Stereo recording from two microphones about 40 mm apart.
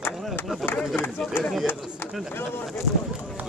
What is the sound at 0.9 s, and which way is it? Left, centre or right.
Speech, left.